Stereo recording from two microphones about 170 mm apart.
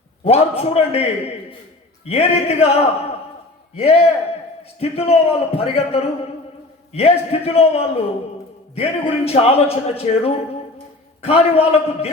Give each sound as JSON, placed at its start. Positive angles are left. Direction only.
{"t": 0.3, "sound": "a man's voice", "side_deg": 35}